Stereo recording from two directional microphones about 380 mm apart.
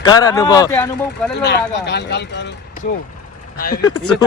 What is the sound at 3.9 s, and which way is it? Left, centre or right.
Speech, left.